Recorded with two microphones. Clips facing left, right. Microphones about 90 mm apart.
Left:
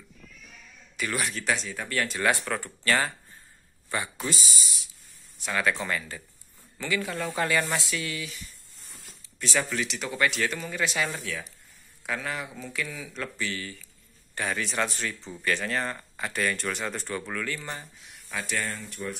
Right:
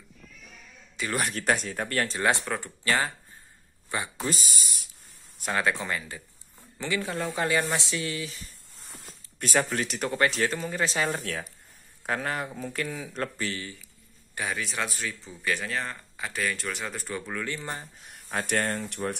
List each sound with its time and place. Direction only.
1.1 s speech: 45° right (ahead or behind)
2.0 s speech: 25° right (ahead or behind)
4.3 s speech: 50° right (ahead or behind)
5.5 s speech: 25° right (ahead or behind)
9.4 s speech: 50° right (ahead or behind)
11.1 s speech: 50° right (ahead or behind)
13.6 s speech: 20° right (ahead or behind)
14.3 s speech: 10° right (ahead or behind)
17.3 s speech: 20° right (ahead or behind)
17.6 s speech: 30° right (ahead or behind)
18.0 s speech: 45° right (ahead or behind); by 19.1 s 60° right (ahead or behind)